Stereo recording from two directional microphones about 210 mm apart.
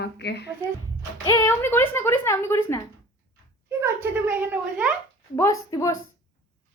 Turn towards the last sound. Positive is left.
turn(degrees=15)  # may be behind; listen again after turning